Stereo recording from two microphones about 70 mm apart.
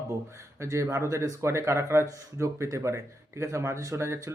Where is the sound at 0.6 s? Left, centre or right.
Right.